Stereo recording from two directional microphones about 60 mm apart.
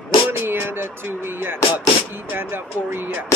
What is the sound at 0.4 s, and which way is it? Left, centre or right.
Music, right.